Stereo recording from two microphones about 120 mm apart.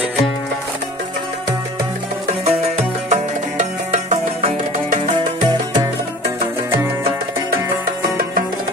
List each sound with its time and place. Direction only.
3.1 s music: 80° right
5.1 s music: 40° right (ahead or behind)